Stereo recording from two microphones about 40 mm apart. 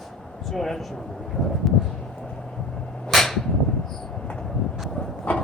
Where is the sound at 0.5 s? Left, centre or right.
Centre.